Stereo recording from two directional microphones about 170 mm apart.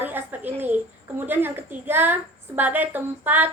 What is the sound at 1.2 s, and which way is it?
Speech, 10° right (ahead or behind).